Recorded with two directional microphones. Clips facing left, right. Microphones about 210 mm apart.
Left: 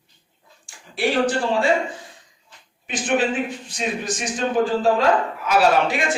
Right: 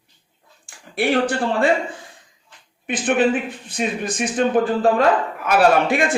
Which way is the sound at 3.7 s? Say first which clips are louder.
Right 2 dB; 55° right (ahead or behind).